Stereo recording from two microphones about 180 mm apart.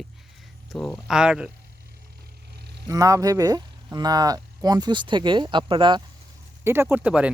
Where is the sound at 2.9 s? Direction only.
20° right (ahead or behind).